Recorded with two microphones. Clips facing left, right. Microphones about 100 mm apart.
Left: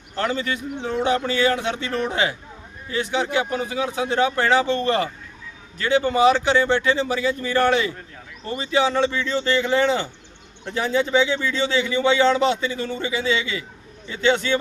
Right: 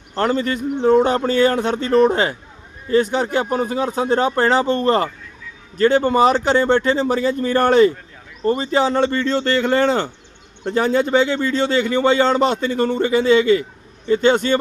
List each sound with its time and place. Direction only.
0.2 s a man's voice: 45° right (ahead or behind)